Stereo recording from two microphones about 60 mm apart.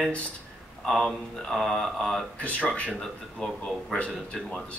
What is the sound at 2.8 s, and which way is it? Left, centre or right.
Speech, centre.